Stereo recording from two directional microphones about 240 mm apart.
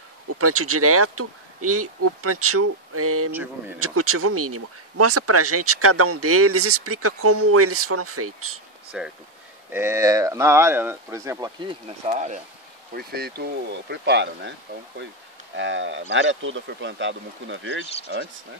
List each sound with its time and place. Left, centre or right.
0.4 s speech: right
8.9 s speech: centre
12.1 s speech: right
12.9 s speech: right